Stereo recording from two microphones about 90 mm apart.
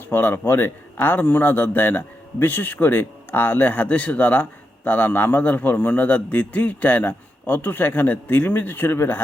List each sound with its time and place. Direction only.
0.1 s a man's voice: 25° left (ahead or behind)